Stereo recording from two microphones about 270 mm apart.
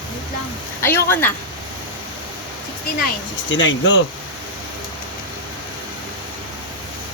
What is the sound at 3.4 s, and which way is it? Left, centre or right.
Speech, left.